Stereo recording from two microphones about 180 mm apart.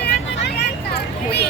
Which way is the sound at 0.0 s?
65° left (ahead or behind).